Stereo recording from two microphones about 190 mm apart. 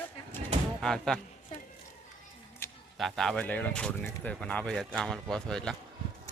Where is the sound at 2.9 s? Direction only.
Centre (ahead or behind).